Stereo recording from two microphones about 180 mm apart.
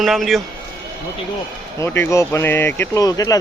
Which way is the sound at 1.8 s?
15° left (ahead or behind).